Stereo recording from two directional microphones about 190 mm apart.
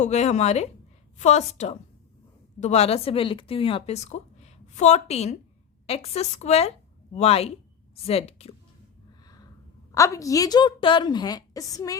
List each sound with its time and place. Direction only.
0.0 s a woman's voice: 35° left (ahead or behind)
9.2 s a sound: 20° left (ahead or behind)
9.9 s a woman's voice: 15° left (ahead or behind)